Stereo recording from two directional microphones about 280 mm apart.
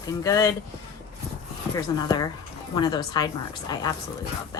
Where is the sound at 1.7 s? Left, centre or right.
Centre.